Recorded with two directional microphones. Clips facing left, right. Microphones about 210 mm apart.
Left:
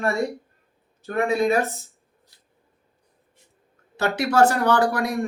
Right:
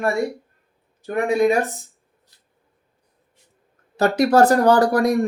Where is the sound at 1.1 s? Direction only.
15° right (ahead or behind).